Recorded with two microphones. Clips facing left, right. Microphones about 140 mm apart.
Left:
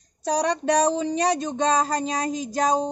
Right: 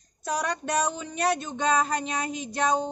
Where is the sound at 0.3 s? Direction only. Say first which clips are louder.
Left 6 dB; 30° left (ahead or behind).